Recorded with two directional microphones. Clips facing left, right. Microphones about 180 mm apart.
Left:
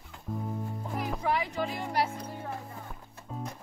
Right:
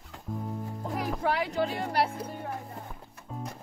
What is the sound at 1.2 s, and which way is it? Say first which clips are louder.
Music: right 3 dB; 75° right (ahead or behind).